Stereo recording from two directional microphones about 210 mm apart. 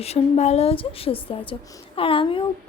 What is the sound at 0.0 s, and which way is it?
A woman's voice, 30° left (ahead or behind).